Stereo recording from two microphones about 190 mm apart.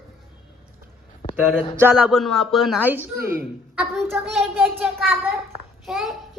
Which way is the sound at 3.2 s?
50° right (ahead or behind).